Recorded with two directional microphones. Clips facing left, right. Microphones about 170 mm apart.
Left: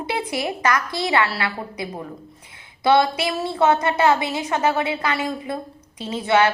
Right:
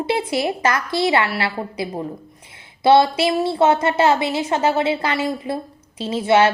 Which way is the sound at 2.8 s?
25° right (ahead or behind).